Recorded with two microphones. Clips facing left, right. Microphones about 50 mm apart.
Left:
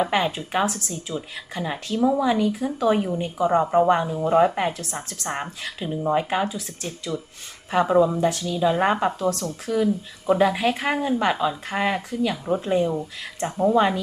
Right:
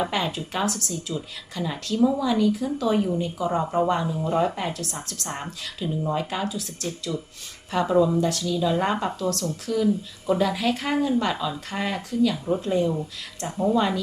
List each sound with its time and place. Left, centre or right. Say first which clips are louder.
0.0 s speech: left 4 dB; left